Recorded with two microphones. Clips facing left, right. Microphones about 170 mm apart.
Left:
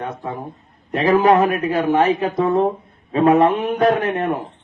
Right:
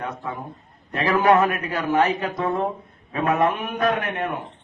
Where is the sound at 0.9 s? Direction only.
25° left (ahead or behind).